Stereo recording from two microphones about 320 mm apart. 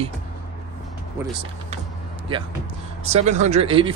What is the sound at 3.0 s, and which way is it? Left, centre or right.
Speech, right.